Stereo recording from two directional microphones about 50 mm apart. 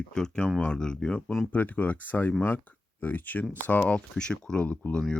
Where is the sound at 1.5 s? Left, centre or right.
Left; by 4.6 s centre.